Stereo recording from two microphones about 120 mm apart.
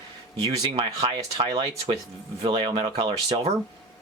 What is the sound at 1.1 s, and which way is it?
Speech, 35° right (ahead or behind).